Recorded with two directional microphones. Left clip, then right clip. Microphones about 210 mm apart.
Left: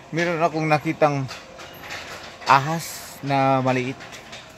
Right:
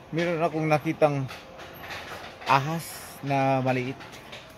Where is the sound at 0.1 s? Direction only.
15° left (ahead or behind).